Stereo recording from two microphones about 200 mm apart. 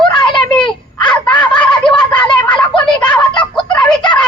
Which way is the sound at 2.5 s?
25° left (ahead or behind).